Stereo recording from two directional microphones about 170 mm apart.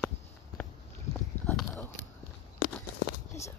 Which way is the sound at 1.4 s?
Centre (ahead or behind).